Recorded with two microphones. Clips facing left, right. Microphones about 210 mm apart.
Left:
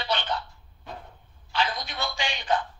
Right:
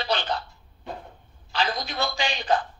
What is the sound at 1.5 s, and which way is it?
A woman's voice, 35° right (ahead or behind).